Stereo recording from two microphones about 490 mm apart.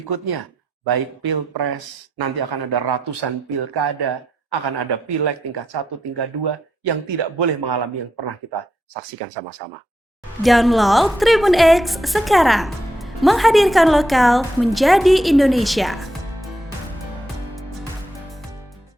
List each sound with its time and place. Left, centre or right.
0.1 s speech: right
10.4 s a woman's voice: centre
17.5 s music: centre